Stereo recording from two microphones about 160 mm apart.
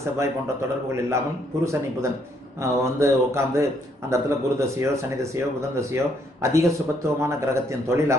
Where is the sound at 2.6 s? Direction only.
15° right (ahead or behind).